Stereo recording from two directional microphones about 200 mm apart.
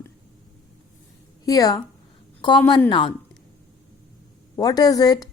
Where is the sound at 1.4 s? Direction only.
15° left (ahead or behind).